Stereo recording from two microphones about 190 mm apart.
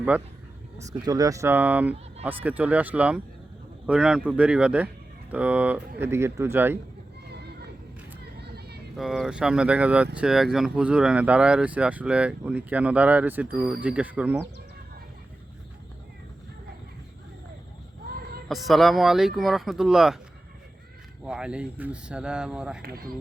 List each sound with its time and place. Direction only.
0.8 s speech: 20° right (ahead or behind)
8.2 s vehicle: 60° right (ahead or behind)
9.0 s speech: centre (ahead or behind)
18.4 s speech: centre (ahead or behind)
21.2 s speech: 5° right (ahead or behind)
22.8 s speech: 55° right (ahead or behind)